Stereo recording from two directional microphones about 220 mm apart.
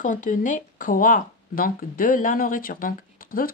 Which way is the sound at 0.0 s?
35° left (ahead or behind).